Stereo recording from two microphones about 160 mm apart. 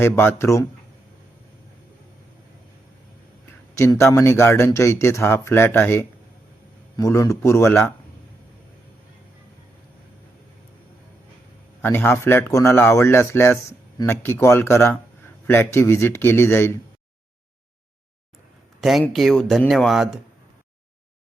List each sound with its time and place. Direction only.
0.0 s a man's voice: 15° left (ahead or behind)
3.8 s a man's voice: 15° left (ahead or behind)
11.8 s a man's voice: 10° left (ahead or behind)
18.8 s speech: centre (ahead or behind)